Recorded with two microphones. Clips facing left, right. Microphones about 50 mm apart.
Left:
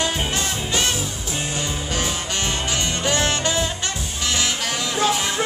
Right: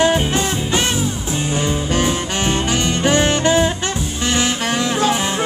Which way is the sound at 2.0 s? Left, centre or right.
Right.